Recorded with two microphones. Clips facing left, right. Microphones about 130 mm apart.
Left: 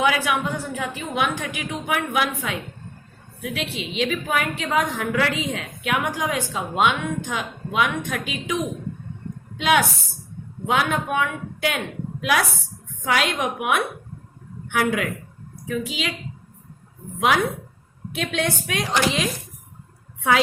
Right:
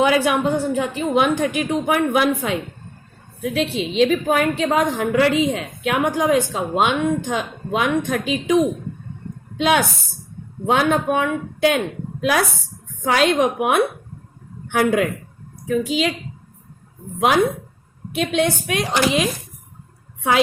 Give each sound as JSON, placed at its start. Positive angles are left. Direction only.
{"t": 0.0, "sound": "a woman's voice", "side_deg": -30}
{"t": 18.4, "sound": "speech", "side_deg": -15}